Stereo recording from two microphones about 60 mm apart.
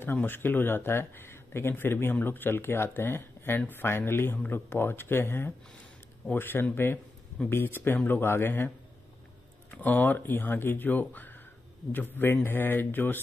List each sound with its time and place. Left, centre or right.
0.0 s speech: left
9.7 s speech: left